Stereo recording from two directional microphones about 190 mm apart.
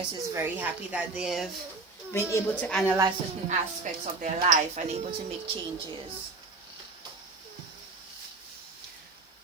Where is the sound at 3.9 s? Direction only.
40° right (ahead or behind).